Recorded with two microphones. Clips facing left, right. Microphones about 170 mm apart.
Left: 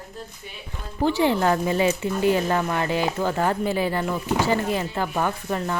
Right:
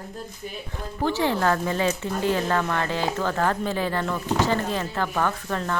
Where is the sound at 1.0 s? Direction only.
15° left (ahead or behind).